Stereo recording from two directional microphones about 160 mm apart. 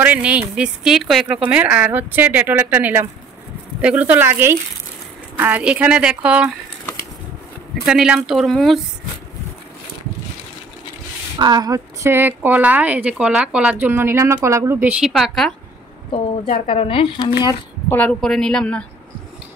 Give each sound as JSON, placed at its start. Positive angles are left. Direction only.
{"t": 0.0, "sound": "a woman's voice", "side_deg": -10}
{"t": 7.8, "sound": "speech", "side_deg": -5}
{"t": 11.3, "sound": "a woman's voice", "side_deg": -25}
{"t": 16.6, "sound": "speech", "side_deg": 35}
{"t": 17.8, "sound": "speech", "side_deg": 10}